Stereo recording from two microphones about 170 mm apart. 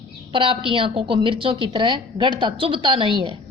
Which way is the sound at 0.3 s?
30° right (ahead or behind).